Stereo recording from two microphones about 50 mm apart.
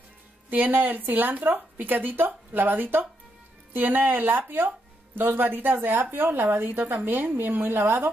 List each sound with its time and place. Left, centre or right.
0.5 s a woman's voice: right